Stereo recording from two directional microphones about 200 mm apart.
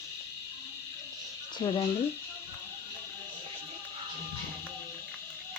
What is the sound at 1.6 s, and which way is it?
Speech, 20° left (ahead or behind).